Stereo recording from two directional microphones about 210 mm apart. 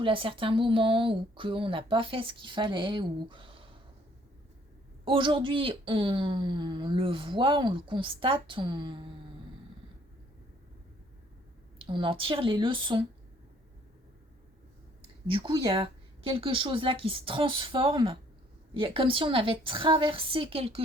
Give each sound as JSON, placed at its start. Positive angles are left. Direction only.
{"t": 0.0, "sound": "speech", "side_deg": -25}
{"t": 5.0, "sound": "speech", "side_deg": -25}
{"t": 11.8, "sound": "speech", "side_deg": -25}
{"t": 15.3, "sound": "speech", "side_deg": -25}